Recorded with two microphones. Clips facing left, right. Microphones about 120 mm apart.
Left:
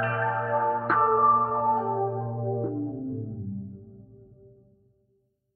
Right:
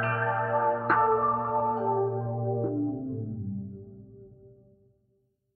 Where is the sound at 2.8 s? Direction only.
25° right (ahead or behind).